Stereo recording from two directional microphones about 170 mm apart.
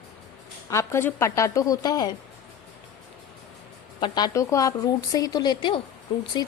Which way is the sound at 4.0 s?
25° left (ahead or behind).